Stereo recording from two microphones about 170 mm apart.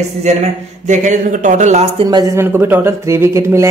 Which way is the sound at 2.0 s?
25° right (ahead or behind).